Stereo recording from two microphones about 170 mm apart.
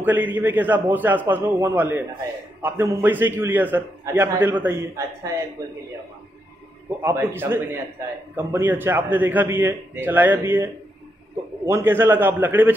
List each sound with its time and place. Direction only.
0.0 s a man's voice: 10° right (ahead or behind)
7.0 s a man's voice: 15° right (ahead or behind)